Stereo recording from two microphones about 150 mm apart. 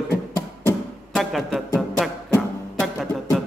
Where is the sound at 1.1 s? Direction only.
Centre (ahead or behind).